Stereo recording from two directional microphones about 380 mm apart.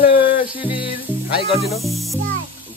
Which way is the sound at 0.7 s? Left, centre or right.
Centre.